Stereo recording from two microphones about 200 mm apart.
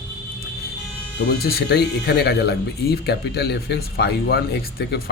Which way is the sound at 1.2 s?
55° left (ahead or behind).